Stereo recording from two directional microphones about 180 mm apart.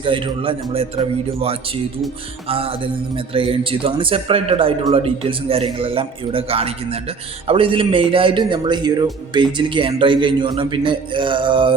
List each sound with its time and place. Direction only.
0.0 s a man's voice: 30° right (ahead or behind)
2.5 s a man's voice: 30° right (ahead or behind)